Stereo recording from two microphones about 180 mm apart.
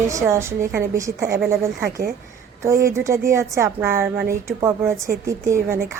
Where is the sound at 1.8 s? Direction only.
55° right (ahead or behind).